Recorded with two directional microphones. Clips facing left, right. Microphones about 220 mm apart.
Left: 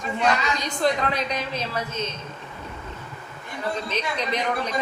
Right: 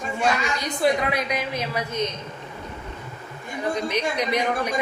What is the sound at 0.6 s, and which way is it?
A woman's voice, 10° right (ahead or behind).